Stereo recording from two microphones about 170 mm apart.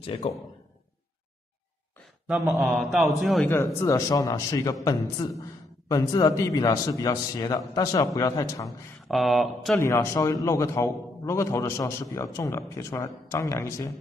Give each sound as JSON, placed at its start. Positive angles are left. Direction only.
{"t": 0.0, "sound": "a man's voice", "side_deg": 35}
{"t": 2.2, "sound": "speech", "side_deg": 0}
{"t": 3.4, "sound": "a man's voice", "side_deg": 15}
{"t": 8.6, "sound": "speech", "side_deg": 0}
{"t": 9.8, "sound": "a man's voice", "side_deg": 15}